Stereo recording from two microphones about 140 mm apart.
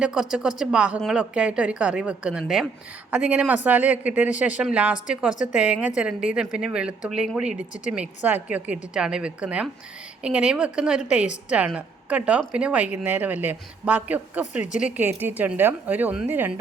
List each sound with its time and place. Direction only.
0.0 s a woman's voice: 5° right (ahead or behind)
5.3 s a woman's voice: 65° left (ahead or behind)
5.5 s a woman's voice: 10° right (ahead or behind)